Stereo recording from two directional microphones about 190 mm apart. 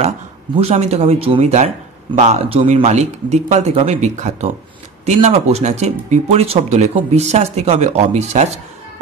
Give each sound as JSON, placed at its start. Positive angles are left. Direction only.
{"t": 0.6, "sound": "speech", "side_deg": -35}